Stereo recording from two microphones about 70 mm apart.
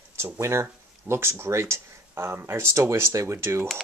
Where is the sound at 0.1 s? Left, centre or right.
Right.